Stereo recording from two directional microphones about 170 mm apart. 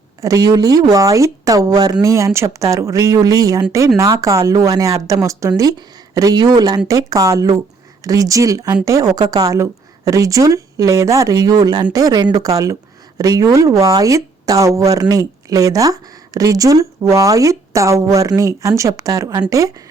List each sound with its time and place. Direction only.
0.2 s speech: 20° right (ahead or behind)